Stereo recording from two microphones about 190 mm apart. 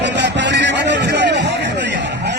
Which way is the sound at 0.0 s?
65° right (ahead or behind).